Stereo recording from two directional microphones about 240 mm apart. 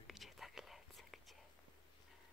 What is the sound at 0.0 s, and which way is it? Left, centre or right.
Whispering, centre.